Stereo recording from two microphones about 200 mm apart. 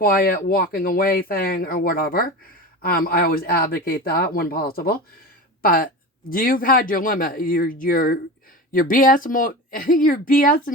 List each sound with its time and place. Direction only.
0.0 s speech: 45° left (ahead or behind)